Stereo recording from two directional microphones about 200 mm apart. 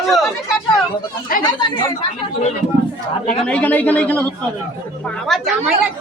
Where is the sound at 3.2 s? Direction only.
5° left (ahead or behind).